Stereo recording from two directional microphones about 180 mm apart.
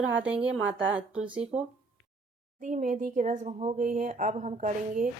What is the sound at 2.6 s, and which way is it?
Speech, 45° right (ahead or behind).